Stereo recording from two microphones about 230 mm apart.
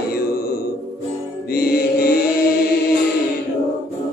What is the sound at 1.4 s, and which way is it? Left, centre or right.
Music, left.